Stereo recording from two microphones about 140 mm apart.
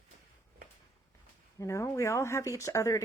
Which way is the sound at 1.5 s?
20° left (ahead or behind).